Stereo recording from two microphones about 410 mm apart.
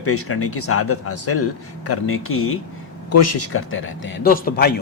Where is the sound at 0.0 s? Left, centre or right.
Left.